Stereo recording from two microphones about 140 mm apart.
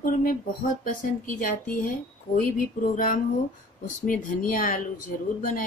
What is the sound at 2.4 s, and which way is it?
Speech, 80° left.